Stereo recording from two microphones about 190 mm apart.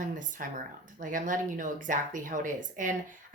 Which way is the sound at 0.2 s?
45° right (ahead or behind).